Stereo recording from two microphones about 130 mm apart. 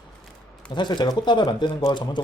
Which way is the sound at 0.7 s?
35° left (ahead or behind).